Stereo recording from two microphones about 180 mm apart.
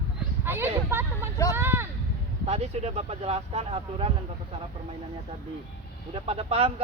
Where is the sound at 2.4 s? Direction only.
35° right (ahead or behind).